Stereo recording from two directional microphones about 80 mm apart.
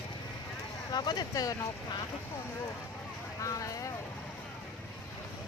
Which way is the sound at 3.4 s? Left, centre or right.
Left.